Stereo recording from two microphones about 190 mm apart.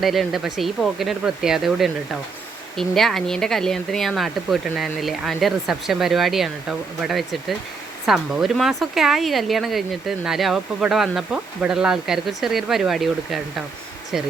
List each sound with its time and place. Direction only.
0.0 s speech: centre (ahead or behind)